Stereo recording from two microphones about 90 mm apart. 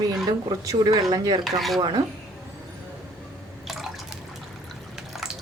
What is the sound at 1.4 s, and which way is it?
Speech, centre (ahead or behind).